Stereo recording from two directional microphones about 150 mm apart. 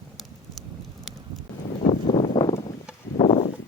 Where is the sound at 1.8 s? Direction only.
40° left (ahead or behind).